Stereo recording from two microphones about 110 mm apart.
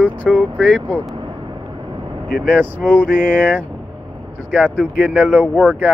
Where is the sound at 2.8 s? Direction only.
10° left (ahead or behind).